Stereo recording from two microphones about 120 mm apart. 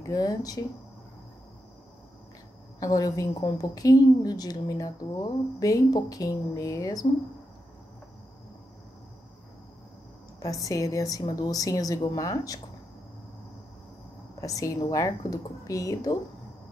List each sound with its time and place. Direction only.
0.0 s a woman's voice: 30° left (ahead or behind)
2.8 s a woman's voice: 30° left (ahead or behind)
10.4 s a woman's voice: 30° left (ahead or behind)
14.4 s a woman's voice: 30° left (ahead or behind)